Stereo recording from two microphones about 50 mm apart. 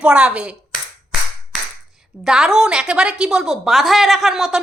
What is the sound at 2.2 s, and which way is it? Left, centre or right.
A woman's voice, centre.